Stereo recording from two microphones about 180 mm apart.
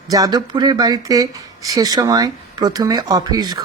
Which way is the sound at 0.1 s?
20° right (ahead or behind).